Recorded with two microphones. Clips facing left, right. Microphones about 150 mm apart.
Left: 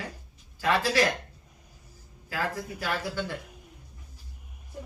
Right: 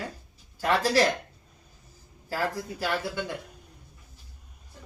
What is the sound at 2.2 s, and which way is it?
Speech, 35° right (ahead or behind).